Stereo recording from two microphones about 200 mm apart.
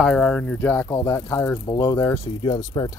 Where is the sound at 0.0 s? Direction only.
5° left (ahead or behind).